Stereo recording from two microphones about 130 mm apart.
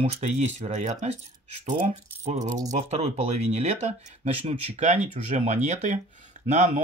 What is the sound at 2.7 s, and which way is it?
Speech, 55° right (ahead or behind).